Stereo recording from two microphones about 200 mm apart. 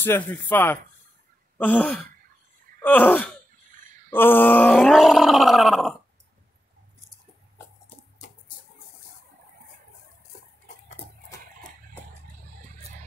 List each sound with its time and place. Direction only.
0.0 s speech: 10° left (ahead or behind)
4.1 s groan: 10° left (ahead or behind)
11.0 s a sound: 30° left (ahead or behind)